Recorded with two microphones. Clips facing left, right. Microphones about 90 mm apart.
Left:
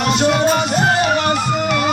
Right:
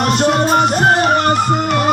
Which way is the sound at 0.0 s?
50° right (ahead or behind).